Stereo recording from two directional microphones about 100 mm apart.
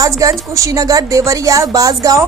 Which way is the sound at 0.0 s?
35° right (ahead or behind).